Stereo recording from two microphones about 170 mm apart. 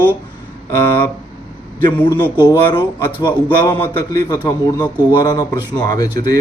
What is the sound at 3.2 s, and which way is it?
A man's voice, 10° left (ahead or behind).